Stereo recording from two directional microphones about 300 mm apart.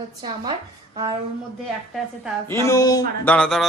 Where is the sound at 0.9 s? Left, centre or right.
Centre.